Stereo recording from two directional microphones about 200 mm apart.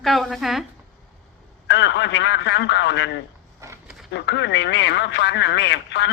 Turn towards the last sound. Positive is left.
turn(degrees=60)  # may be behind; listen again after turning